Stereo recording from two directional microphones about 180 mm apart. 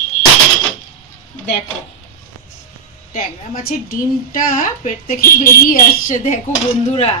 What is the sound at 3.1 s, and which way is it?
A woman's voice, 45° left (ahead or behind).